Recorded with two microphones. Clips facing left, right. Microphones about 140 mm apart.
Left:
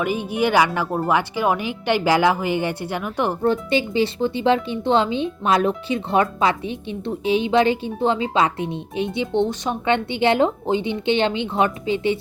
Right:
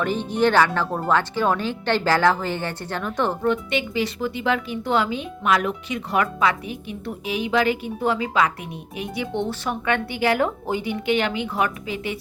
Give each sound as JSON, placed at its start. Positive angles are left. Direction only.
{"t": 0.0, "sound": "speech", "side_deg": 10}
{"t": 3.4, "sound": "speech", "side_deg": 30}